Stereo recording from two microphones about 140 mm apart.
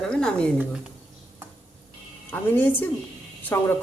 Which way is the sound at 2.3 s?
15° left (ahead or behind).